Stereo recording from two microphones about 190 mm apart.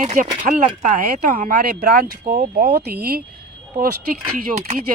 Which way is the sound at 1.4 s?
50° right (ahead or behind).